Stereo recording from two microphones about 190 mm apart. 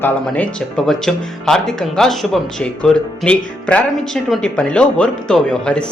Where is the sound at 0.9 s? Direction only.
Centre (ahead or behind).